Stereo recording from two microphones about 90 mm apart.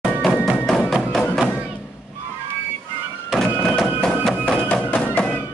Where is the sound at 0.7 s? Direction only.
5° left (ahead or behind).